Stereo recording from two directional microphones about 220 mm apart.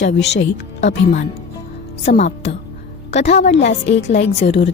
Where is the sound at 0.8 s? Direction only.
30° left (ahead or behind).